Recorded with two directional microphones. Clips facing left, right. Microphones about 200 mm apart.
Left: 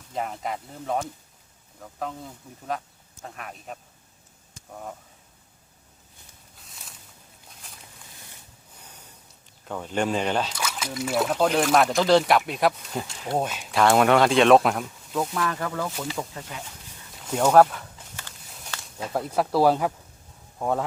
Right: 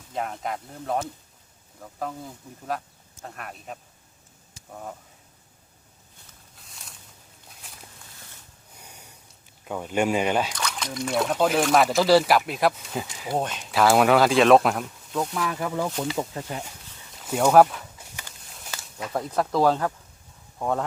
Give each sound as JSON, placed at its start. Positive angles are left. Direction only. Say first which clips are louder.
{"t": 0.1, "sound": "speech", "louder": "even", "side_deg": 0}
{"t": 6.6, "sound": "a sound", "louder": "even", "side_deg": 0}
{"t": 8.8, "sound": "gasp", "louder": "right 2 dB", "side_deg": -10}
{"t": 9.6, "sound": "speech", "louder": "right 2 dB", "side_deg": -10}
{"t": 10.5, "sound": "speech", "louder": "even", "side_deg": 5}
{"t": 15.9, "sound": "speech", "louder": "right 4 dB", "side_deg": 0}
{"t": 18.5, "sound": "a sound", "louder": "even", "side_deg": -5}
{"t": 19.1, "sound": "speech", "louder": "left 1 dB", "side_deg": 5}